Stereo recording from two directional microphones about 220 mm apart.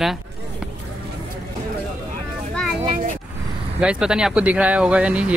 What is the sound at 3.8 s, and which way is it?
Speech, 5° right (ahead or behind).